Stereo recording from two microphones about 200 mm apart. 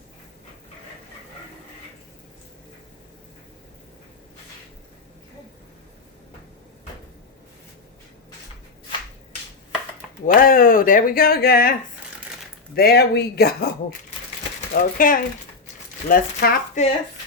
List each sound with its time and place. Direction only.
10.2 s speech: 45° left (ahead or behind)
12.7 s speech: 50° left (ahead or behind)
14.7 s speech: 45° left (ahead or behind)
16.8 s speech: 35° left (ahead or behind)